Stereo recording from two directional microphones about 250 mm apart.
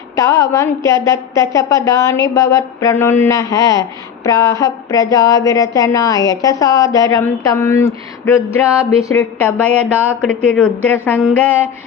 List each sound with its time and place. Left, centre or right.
0.2 s a woman's voice: centre